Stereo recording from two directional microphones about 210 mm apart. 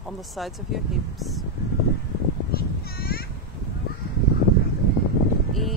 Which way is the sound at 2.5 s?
45° left (ahead or behind).